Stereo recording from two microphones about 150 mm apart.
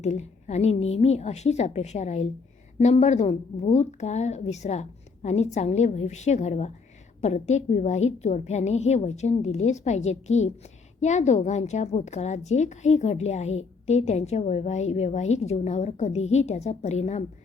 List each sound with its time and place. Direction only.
0.0 s a woman's voice: 50° left (ahead or behind)